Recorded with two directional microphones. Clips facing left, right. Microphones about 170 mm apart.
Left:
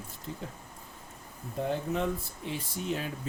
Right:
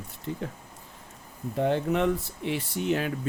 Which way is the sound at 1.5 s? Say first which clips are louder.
Right 6 dB; 75° right (ahead or behind).